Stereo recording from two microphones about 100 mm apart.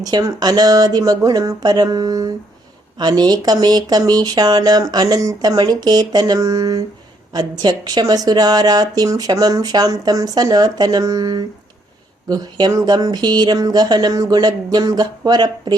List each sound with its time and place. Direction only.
0.0 s a woman's voice: 40° right (ahead or behind)